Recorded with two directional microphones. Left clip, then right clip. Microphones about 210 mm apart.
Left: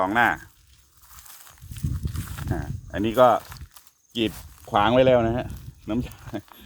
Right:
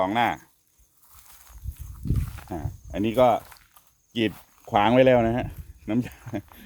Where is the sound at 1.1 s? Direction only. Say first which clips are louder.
Left 5 dB; 50° left (ahead or behind).